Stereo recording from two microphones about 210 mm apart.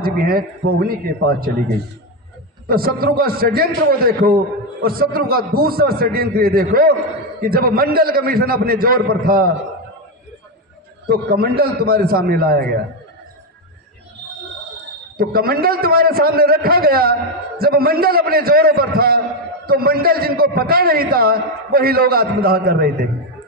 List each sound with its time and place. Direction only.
0.0 s a man's voice: 45° right (ahead or behind)
2.6 s a man's voice: 45° right (ahead or behind)
11.1 s a man's voice: 45° right (ahead or behind)
15.1 s a man's voice: 45° right (ahead or behind)